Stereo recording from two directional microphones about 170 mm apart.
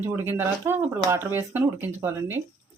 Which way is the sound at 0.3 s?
15° right (ahead or behind).